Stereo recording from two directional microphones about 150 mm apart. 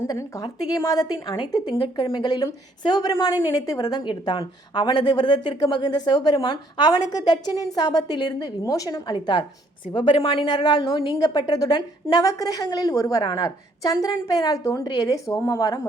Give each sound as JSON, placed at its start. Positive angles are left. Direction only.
{"t": 0.0, "sound": "a woman's voice", "side_deg": 20}